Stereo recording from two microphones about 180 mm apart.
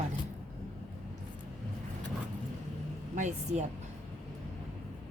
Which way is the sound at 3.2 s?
40° right (ahead or behind).